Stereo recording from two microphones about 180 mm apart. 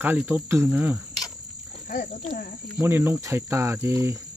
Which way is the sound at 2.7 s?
10° right (ahead or behind).